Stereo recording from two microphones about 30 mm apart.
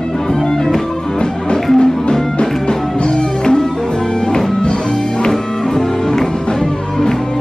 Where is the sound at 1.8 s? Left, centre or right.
Left.